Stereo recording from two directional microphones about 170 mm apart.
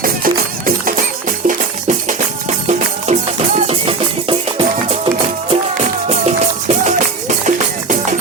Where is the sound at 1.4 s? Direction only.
50° right (ahead or behind).